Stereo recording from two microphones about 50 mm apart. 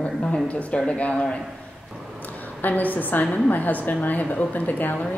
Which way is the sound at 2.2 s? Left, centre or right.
Left.